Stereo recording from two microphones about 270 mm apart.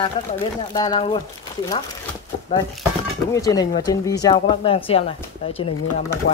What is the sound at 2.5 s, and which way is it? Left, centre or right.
Speech, centre.